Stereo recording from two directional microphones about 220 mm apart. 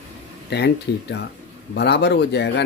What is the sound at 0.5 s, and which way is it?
Speech, 50° left (ahead or behind).